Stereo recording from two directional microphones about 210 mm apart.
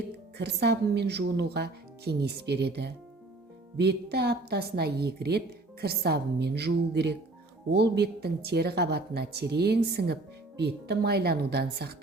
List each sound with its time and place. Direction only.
0.3 s a woman's voice: 55° right (ahead or behind)